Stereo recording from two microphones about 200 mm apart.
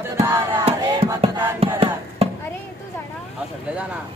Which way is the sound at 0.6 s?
30° right (ahead or behind).